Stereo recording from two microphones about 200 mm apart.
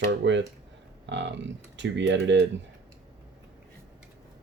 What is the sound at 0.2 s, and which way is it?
Speech, 65° right (ahead or behind).